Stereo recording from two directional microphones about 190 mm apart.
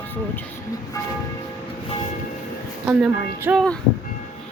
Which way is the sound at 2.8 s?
10° right (ahead or behind).